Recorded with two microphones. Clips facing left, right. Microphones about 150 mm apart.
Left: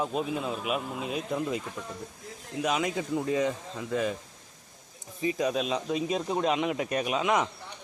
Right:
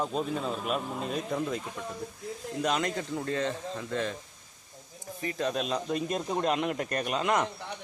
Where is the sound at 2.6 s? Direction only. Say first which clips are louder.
Left 1 dB; 5° left (ahead or behind).